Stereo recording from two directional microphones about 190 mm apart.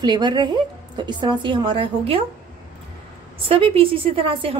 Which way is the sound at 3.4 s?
30° right (ahead or behind).